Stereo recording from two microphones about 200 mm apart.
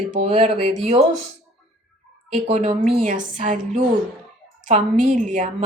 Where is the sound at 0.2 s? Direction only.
35° right (ahead or behind).